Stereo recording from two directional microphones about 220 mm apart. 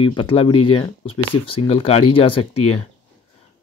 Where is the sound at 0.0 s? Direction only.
20° left (ahead or behind).